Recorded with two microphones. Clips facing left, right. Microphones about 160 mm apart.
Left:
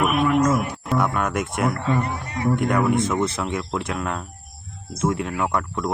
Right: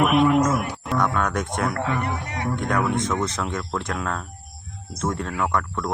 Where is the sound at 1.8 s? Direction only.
75° right (ahead or behind).